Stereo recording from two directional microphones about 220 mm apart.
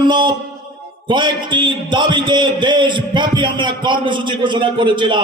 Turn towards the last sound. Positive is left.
turn(degrees=-20)  # may be behind; listen again after turning